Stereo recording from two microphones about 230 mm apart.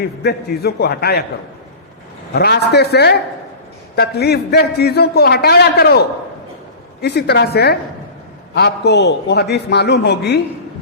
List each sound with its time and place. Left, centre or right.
0.0 s a man's voice: left
2.3 s a man's voice: left